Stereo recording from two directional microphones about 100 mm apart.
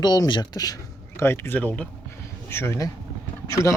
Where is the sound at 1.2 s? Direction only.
25° left (ahead or behind).